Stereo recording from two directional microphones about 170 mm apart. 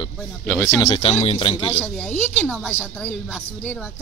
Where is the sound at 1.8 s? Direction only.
10° left (ahead or behind).